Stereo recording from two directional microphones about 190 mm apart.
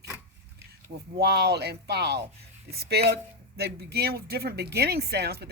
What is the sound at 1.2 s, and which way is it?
Speech, 60° right (ahead or behind).